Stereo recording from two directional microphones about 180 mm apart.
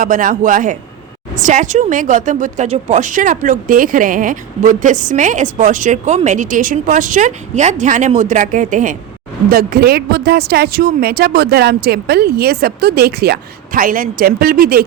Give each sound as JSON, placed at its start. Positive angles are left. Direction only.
{"t": 0.0, "sound": "a woman's voice", "side_deg": -50}